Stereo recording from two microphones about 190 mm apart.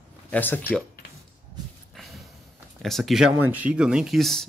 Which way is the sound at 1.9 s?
Centre (ahead or behind).